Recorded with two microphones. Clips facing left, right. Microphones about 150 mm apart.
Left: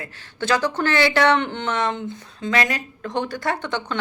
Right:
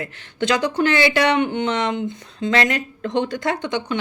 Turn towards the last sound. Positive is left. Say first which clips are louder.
# right 3 dB
turn(degrees=-15)  # may be behind; listen again after turning